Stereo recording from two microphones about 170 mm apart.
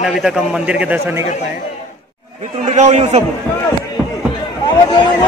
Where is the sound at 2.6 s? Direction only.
45° right (ahead or behind).